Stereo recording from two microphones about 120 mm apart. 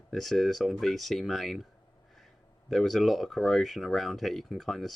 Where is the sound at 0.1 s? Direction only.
Centre (ahead or behind).